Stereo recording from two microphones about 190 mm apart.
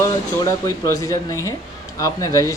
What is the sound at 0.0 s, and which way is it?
Speech, 15° left (ahead or behind).